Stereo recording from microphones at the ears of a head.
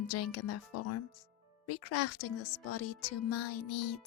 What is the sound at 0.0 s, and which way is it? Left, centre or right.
Speech, left.